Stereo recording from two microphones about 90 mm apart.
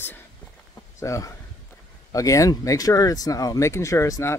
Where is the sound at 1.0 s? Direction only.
35° left (ahead or behind).